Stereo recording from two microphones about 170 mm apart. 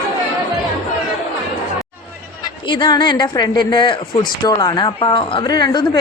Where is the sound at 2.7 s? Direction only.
25° left (ahead or behind).